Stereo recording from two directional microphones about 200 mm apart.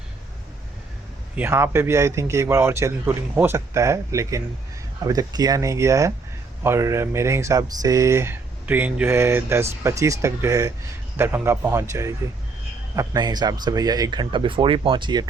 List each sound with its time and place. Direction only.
1.4 s speech: 10° right (ahead or behind)